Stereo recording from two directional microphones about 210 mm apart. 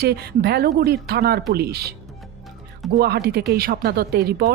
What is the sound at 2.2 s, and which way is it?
Music, centre (ahead or behind).